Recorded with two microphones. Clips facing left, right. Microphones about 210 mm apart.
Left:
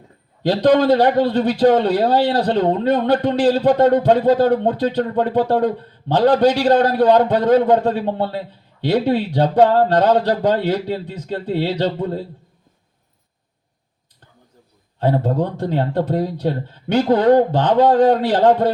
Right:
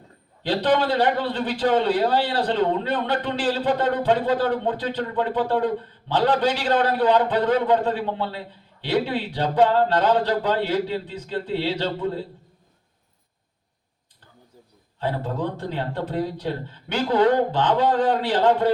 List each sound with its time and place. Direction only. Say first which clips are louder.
0.4 s a man's voice: left 7 dB; 40° left (ahead or behind)
14.9 s a man's voice: left 8 dB; 45° left (ahead or behind)